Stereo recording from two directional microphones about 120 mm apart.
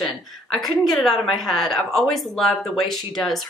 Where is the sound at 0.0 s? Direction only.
Centre (ahead or behind).